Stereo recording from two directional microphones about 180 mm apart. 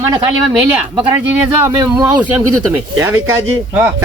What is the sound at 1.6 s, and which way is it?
Speech, 20° right (ahead or behind).